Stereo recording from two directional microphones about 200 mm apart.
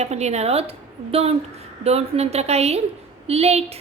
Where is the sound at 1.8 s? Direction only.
30° right (ahead or behind).